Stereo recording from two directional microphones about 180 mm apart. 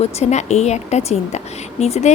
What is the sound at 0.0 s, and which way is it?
A woman's voice, 40° left (ahead or behind).